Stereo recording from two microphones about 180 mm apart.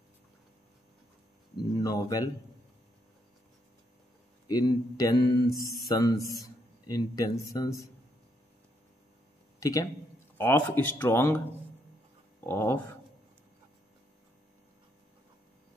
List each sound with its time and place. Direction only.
1.8 s speech: 20° left (ahead or behind)
4.5 s a man's voice: 20° left (ahead or behind)
9.6 s a man's voice: 20° left (ahead or behind)
12.4 s a man's voice: 15° left (ahead or behind)